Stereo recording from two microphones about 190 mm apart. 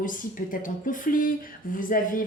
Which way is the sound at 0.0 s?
45° left (ahead or behind).